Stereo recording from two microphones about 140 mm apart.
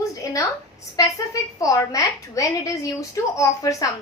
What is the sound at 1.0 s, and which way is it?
A woman's voice, 25° left (ahead or behind).